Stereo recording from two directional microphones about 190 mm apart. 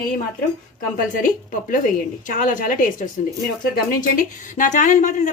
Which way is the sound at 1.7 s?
45° left (ahead or behind).